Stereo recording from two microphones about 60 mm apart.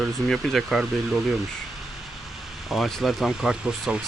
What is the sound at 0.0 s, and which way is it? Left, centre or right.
Speech, centre.